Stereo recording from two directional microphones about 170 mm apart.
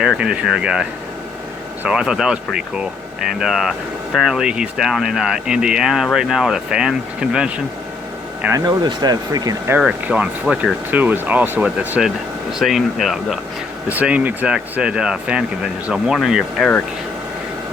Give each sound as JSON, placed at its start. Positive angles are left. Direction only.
{"t": 0.0, "sound": "speech", "side_deg": -5}
{"t": 8.5, "sound": "speech", "side_deg": -25}
{"t": 9.7, "sound": "speech", "side_deg": -5}